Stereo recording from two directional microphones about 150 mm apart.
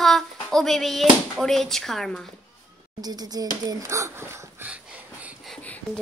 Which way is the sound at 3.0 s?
25° right (ahead or behind).